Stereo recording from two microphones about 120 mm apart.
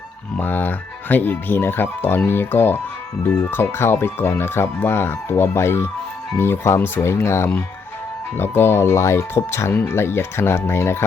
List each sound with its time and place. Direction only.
0.3 s speech: 15° left (ahead or behind)